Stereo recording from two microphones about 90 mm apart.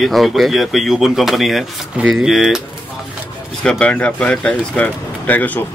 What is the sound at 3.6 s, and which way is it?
Speech, 15° left (ahead or behind).